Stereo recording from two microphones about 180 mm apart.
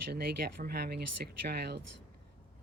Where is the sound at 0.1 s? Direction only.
60° right (ahead or behind).